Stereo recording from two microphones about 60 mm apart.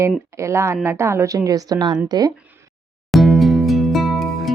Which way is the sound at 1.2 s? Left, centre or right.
Right.